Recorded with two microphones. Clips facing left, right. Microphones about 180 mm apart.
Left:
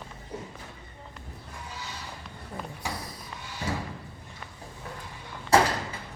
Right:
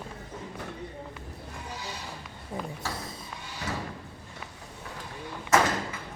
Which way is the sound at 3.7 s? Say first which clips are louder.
Left 2 dB; 30° left (ahead or behind).